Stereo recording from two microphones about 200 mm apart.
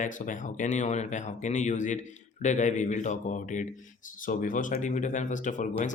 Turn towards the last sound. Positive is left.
turn(degrees=40)  # may be behind; listen again after turning